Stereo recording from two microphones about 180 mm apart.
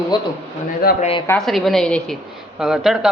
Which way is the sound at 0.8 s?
55° left (ahead or behind).